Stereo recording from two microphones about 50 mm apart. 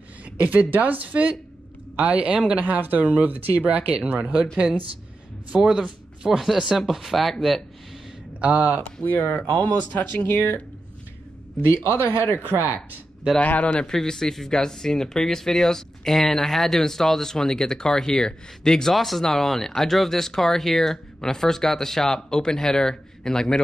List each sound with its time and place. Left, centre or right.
0.2 s speech: right
2.6 s speech: right
5.6 s speech: centre
8.4 s speech: right
8.8 s speech: left
11.7 s speech: left
13.4 s a man's voice: left
13.8 s speech: centre